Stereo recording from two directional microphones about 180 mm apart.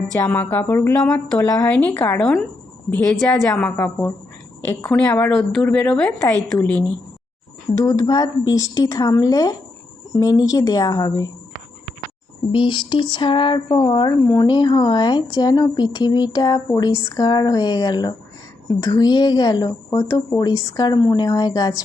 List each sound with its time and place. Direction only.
0.2 s a woman's voice: 10° left (ahead or behind)
7.8 s speech: 20° left (ahead or behind)
12.5 s speech: 25° left (ahead or behind)